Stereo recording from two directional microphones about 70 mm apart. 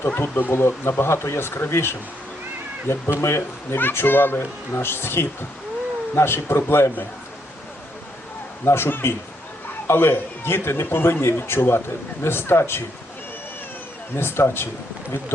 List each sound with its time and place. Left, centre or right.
0.0 s speech: left
8.6 s speech: left
14.2 s speech: left